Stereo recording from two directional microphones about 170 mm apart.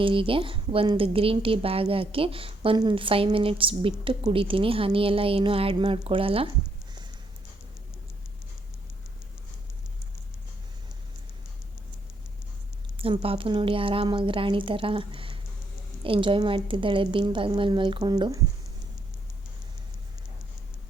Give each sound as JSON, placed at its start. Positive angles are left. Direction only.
{"t": 0.0, "sound": "a woman's voice", "side_deg": -30}
{"t": 13.0, "sound": "a woman's voice", "side_deg": -35}